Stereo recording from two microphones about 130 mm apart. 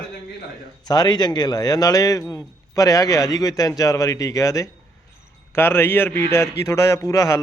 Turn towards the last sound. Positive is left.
turn(degrees=25)  # may be behind; listen again after turning